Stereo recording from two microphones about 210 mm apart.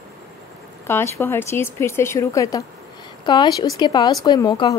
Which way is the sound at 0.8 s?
10° left (ahead or behind).